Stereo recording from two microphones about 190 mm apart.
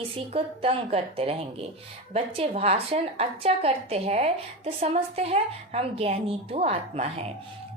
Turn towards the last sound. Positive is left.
turn(degrees=-35)  # may be behind; listen again after turning